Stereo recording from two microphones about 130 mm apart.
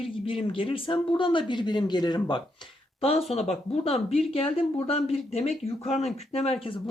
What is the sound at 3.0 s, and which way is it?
Speech, 50° left (ahead or behind).